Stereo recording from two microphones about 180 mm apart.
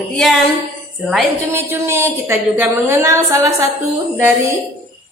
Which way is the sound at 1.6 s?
15° right (ahead or behind).